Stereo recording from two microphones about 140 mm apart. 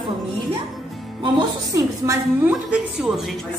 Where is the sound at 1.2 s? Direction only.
30° right (ahead or behind).